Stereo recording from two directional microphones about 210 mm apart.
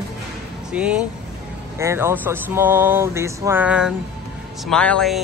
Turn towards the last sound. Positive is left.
turn(degrees=5)  # may be behind; listen again after turning